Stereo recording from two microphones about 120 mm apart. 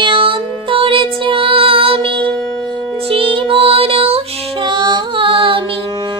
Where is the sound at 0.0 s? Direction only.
45° right (ahead or behind).